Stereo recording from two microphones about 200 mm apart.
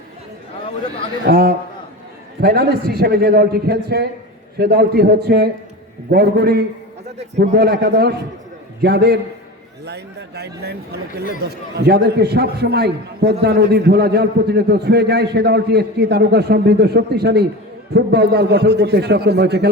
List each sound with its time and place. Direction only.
1.3 s a man's voice: 50° right (ahead or behind)
11.9 s a man's voice: 55° right (ahead or behind)